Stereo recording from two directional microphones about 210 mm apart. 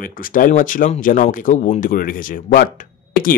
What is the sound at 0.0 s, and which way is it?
Speech, 40° left (ahead or behind).